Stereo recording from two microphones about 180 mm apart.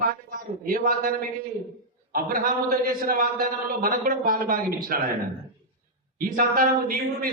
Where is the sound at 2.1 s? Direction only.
55° right (ahead or behind).